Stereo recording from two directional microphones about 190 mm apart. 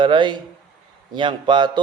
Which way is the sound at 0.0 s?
25° right (ahead or behind).